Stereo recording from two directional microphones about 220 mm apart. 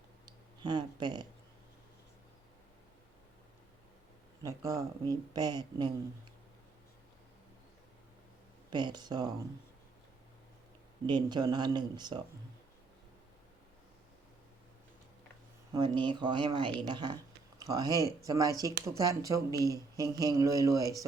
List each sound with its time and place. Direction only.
0.3 s speech: 20° right (ahead or behind)
4.4 s speech: 15° right (ahead or behind)
8.7 s speech: 20° right (ahead or behind)
11.0 s speech: 20° right (ahead or behind)
15.7 s speech: 20° right (ahead or behind)